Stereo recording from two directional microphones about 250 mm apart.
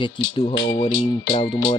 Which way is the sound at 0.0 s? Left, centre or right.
Centre.